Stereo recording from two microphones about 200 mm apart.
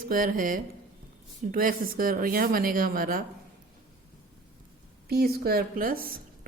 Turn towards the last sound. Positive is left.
turn(degrees=-45)  # may be behind; listen again after turning